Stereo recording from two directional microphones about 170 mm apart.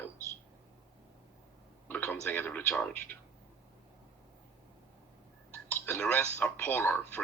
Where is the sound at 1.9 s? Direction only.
10° left (ahead or behind).